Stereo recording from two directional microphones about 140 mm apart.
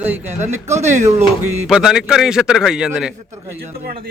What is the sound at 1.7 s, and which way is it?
A man's voice, 5° right (ahead or behind).